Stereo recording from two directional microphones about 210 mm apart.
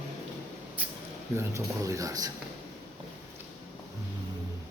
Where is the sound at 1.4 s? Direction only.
15° right (ahead or behind).